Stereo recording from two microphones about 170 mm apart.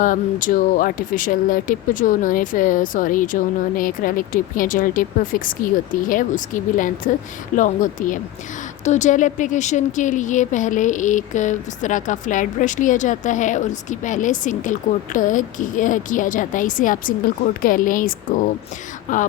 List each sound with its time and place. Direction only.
0.0 s a woman's voice: 50° left (ahead or behind)